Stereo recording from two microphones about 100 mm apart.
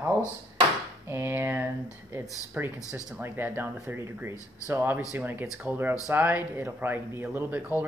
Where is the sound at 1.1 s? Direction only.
20° right (ahead or behind).